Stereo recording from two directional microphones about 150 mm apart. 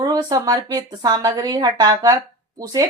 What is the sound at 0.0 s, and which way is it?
Speech, 25° right (ahead or behind).